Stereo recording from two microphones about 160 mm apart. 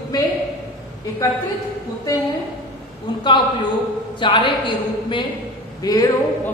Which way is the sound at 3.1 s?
30° left (ahead or behind).